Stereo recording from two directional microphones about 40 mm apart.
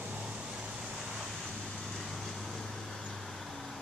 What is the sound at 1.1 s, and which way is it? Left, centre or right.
Vehicle, centre.